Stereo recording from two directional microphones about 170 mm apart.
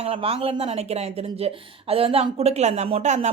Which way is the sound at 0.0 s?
35° right (ahead or behind).